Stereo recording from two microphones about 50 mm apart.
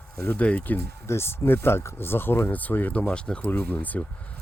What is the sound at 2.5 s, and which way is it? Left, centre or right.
Speech, left.